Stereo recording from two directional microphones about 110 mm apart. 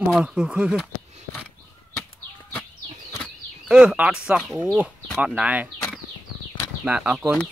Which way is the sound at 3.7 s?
10° right (ahead or behind).